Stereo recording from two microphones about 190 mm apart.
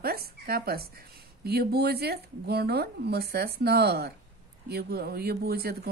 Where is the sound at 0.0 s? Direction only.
55° right (ahead or behind).